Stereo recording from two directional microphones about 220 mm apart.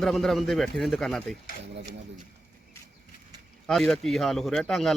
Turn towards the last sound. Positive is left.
turn(degrees=0)  # may be behind; listen again after turning